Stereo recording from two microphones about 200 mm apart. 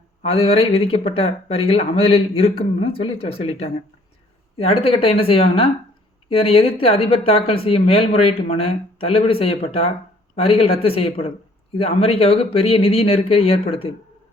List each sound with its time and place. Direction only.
0.2 s speech: 30° left (ahead or behind)
4.5 s speech: 30° left (ahead or behind)